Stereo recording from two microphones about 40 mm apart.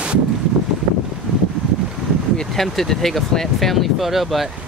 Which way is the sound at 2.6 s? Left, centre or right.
Centre.